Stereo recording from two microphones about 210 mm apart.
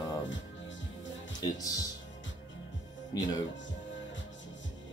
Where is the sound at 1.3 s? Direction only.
15° left (ahead or behind).